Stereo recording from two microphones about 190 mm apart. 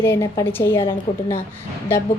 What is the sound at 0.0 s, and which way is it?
Speech, 15° left (ahead or behind).